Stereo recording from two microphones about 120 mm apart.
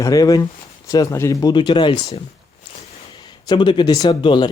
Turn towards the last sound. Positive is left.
turn(degrees=40)  # may be behind; listen again after turning